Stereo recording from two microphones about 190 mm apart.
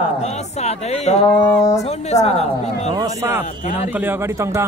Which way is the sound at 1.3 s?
15° left (ahead or behind).